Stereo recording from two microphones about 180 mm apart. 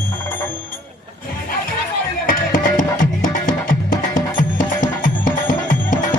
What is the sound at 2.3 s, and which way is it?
Music, 45° left (ahead or behind).